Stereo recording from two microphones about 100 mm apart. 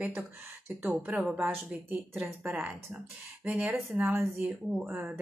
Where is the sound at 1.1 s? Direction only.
10° right (ahead or behind).